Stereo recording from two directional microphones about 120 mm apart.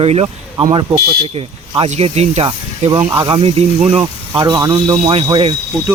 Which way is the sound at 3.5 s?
60° right (ahead or behind).